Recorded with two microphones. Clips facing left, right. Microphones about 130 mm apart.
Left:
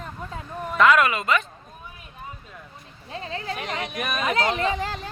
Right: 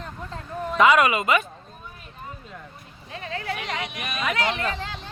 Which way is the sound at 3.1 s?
30° left (ahead or behind).